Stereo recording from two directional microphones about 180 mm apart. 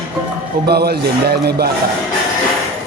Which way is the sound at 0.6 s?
60° right (ahead or behind).